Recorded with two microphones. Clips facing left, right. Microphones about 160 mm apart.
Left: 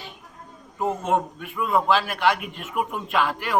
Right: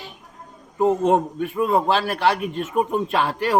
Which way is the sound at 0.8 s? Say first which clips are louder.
Right 6 dB; 35° right (ahead or behind).